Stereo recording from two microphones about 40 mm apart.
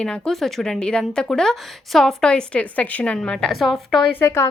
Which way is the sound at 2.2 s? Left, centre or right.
Left.